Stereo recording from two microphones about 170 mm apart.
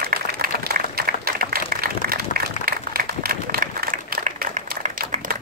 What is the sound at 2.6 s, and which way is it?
Applause, 60° right (ahead or behind).